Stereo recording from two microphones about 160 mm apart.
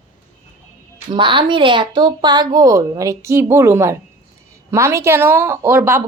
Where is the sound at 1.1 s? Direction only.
30° right (ahead or behind); by 6.0 s 15° right (ahead or behind).